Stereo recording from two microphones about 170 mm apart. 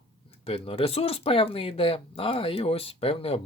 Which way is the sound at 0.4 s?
35° left (ahead or behind).